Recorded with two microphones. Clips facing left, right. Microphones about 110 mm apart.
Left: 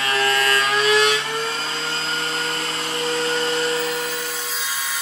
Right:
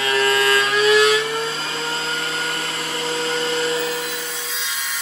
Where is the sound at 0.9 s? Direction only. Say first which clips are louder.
Right 4 dB; 30° left (ahead or behind).